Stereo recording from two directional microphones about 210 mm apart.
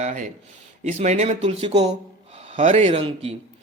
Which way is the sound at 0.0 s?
35° right (ahead or behind).